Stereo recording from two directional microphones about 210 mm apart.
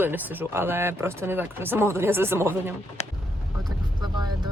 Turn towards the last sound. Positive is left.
turn(degrees=-20)  # may be behind; listen again after turning